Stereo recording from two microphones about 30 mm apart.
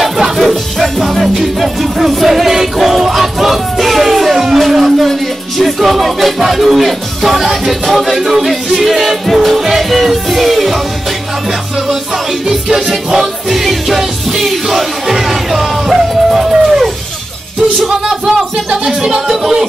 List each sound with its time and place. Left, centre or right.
0.7 s music: centre
4.6 s a sound: centre
5.6 s music: centre
12.4 s music: right
17.8 s music: right
19.1 s music: centre